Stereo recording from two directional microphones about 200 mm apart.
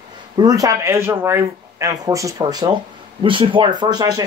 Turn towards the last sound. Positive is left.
turn(degrees=-20)  # may be behind; listen again after turning